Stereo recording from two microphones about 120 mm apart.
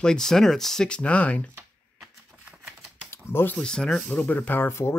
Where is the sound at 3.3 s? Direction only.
20° left (ahead or behind).